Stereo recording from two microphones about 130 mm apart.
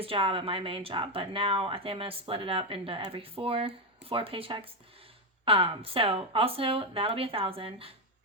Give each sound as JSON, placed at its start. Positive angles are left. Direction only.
{"t": 0.0, "sound": "speech", "side_deg": -45}